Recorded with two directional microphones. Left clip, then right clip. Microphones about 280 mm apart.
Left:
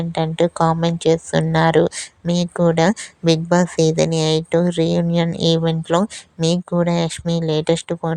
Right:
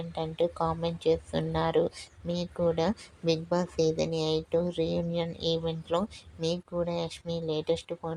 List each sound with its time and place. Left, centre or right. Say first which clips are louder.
0.0 s a woman's voice: left 11 dB; left